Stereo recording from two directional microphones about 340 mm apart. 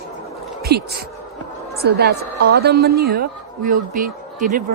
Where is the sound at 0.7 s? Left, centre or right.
Right.